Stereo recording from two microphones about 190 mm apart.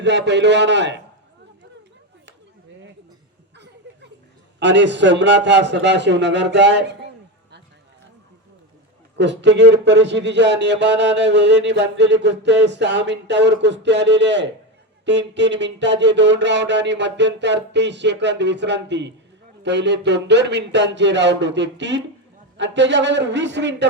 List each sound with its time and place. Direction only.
0.0 s speech: 65° right (ahead or behind)
4.6 s speech: 70° right (ahead or behind)
9.1 s speech: 65° right (ahead or behind)